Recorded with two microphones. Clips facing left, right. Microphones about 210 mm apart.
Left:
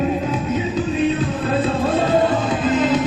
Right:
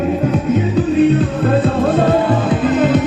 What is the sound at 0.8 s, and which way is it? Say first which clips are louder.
Music: right 8 dB; 55° right (ahead or behind).